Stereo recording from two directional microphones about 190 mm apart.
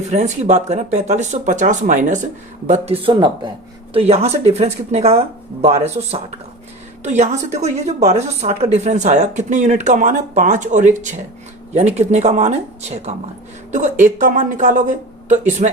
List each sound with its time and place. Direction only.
0.1 s a woman's voice: 35° right (ahead or behind)